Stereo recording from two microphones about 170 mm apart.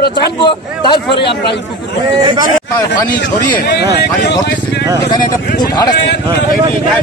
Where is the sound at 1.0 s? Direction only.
80° left.